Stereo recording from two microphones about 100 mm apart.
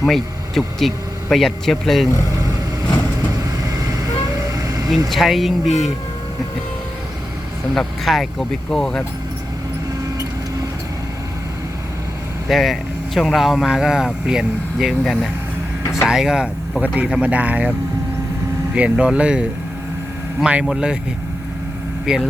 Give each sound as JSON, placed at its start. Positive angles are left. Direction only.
{"t": 0.1, "sound": "speech", "side_deg": 0}
{"t": 3.6, "sound": "vehicle", "side_deg": -35}
{"t": 5.0, "sound": "speech", "side_deg": 0}
{"t": 7.7, "sound": "speech", "side_deg": 0}
{"t": 12.5, "sound": "speech", "side_deg": 0}
{"t": 22.1, "sound": "speech", "side_deg": -5}